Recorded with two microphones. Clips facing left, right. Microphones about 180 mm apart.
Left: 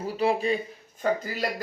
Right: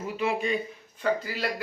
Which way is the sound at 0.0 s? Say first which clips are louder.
Left 3 dB; 35° left (ahead or behind).